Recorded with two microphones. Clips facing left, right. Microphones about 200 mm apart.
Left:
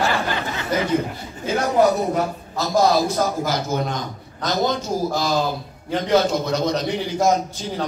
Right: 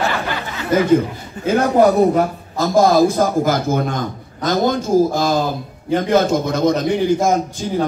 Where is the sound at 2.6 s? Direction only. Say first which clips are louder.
Right 5 dB; 50° right (ahead or behind).